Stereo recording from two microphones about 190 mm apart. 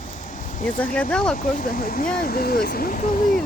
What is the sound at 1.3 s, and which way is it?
Speech, 45° left (ahead or behind).